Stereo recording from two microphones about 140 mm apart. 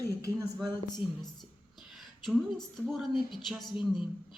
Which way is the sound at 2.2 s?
Centre (ahead or behind).